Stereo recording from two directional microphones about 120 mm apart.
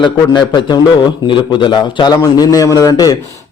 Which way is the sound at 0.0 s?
40° left (ahead or behind).